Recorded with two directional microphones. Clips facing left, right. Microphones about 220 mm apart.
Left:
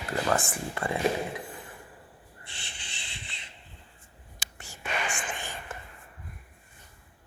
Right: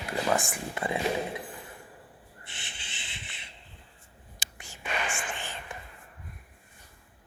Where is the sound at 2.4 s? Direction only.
20° right (ahead or behind).